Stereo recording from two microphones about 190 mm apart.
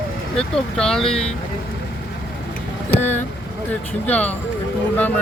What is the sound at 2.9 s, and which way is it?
Speech, 35° left (ahead or behind).